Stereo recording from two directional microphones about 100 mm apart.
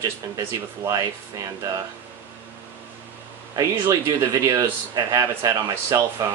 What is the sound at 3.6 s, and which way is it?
A man's voice, 25° right (ahead or behind).